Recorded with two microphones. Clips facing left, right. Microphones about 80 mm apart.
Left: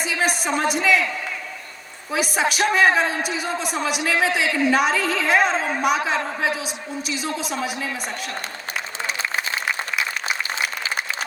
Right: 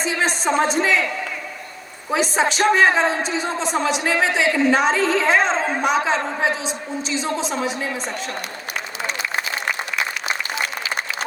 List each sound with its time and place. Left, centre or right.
0.0 s a man's voice: right
2.0 s a man's voice: right
10.5 s applause: left